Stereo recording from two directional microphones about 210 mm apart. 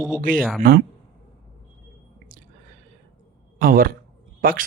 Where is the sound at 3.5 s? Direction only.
45° right (ahead or behind).